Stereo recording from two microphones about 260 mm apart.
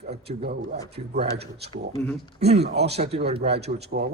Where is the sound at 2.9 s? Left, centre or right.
Right.